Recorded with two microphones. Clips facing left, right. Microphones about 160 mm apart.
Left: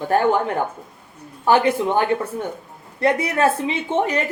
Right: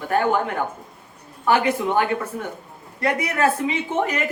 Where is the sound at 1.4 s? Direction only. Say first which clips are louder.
Left 3 dB; 30° left (ahead or behind).